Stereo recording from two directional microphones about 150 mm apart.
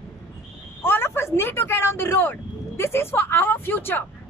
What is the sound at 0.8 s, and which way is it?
Speech, 15° left (ahead or behind).